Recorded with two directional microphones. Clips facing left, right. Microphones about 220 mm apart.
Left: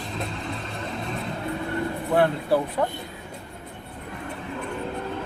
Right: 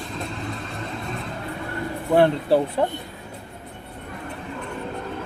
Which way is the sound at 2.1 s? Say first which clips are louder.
Right 4 dB; 30° right (ahead or behind).